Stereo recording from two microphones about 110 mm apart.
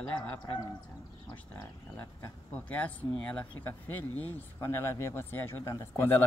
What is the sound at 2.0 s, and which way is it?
Speech, 15° left (ahead or behind).